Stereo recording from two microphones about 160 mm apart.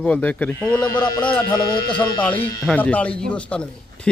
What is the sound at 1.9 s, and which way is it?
Speech, 30° left (ahead or behind).